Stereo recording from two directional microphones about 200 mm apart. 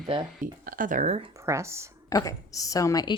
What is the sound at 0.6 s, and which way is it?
Speech, 45° right (ahead or behind).